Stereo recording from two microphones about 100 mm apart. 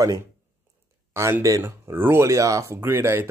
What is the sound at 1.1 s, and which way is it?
Speech, 30° right (ahead or behind).